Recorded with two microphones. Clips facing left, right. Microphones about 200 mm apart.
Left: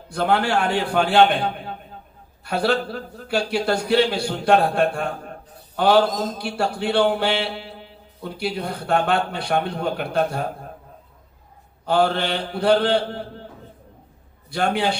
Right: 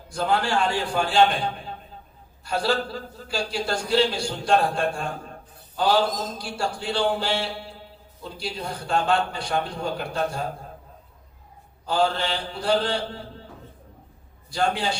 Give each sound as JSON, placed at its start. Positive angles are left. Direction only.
{"t": 0.1, "sound": "a man's voice", "side_deg": 60}
{"t": 11.9, "sound": "a man's voice", "side_deg": 60}
{"t": 14.5, "sound": "a man's voice", "side_deg": 60}